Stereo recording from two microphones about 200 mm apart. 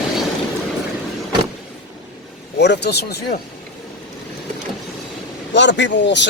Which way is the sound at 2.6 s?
60° left (ahead or behind).